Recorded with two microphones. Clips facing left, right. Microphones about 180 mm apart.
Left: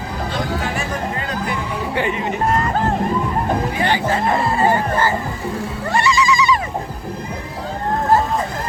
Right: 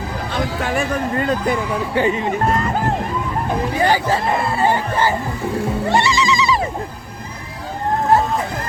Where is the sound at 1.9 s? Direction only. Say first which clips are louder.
Right 3 dB; 35° right (ahead or behind).